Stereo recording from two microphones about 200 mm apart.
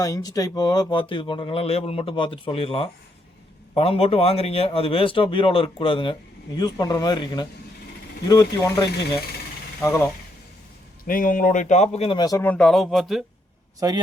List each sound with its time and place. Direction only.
0.0 s speech: 20° left (ahead or behind)
11.0 s speech: 45° left (ahead or behind); by 13.2 s centre (ahead or behind)
13.7 s a man's voice: 20° right (ahead or behind)